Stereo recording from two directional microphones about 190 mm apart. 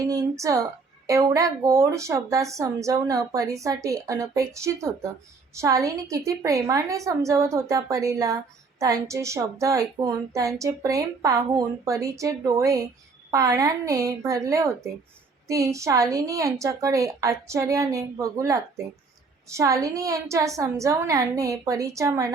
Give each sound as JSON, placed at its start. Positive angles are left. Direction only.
{"t": 0.0, "sound": "a woman's voice", "side_deg": -15}